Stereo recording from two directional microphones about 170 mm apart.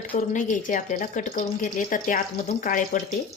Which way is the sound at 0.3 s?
50° left (ahead or behind).